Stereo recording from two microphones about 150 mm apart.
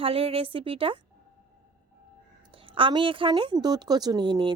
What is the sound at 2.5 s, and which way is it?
A woman's voice, 35° right (ahead or behind).